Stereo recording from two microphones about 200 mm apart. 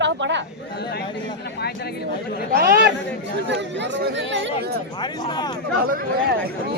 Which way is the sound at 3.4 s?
65° right (ahead or behind).